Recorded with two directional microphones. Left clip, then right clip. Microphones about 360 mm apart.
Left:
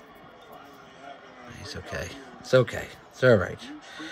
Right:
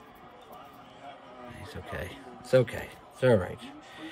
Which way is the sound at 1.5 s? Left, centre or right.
Centre.